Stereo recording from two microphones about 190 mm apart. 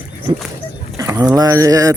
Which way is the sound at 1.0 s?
15° right (ahead or behind).